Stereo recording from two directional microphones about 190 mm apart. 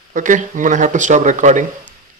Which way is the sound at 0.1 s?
40° right (ahead or behind).